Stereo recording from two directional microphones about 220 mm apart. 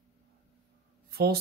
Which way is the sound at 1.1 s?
45° right (ahead or behind).